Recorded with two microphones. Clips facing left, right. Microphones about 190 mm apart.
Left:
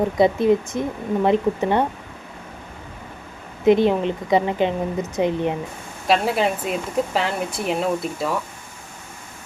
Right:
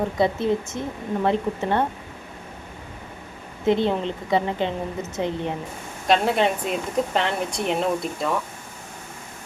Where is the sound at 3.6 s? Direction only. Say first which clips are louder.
Left 5 dB; 15° left (ahead or behind).